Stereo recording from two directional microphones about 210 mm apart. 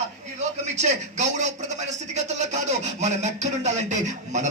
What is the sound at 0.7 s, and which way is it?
A man's voice, 35° right (ahead or behind).